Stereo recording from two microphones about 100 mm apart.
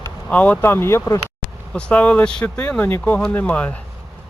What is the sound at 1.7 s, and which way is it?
Speech, 15° left (ahead or behind).